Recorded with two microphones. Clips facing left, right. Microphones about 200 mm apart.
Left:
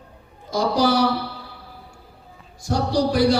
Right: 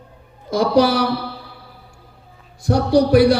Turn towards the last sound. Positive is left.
turn(degrees=-60)  # may be behind; listen again after turning